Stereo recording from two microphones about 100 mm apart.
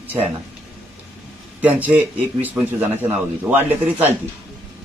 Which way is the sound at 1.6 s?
15° right (ahead or behind).